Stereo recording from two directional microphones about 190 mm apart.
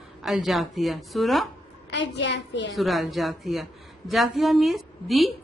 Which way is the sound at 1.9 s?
65° left (ahead or behind).